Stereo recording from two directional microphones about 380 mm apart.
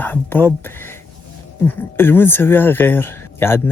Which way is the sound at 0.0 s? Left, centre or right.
Centre.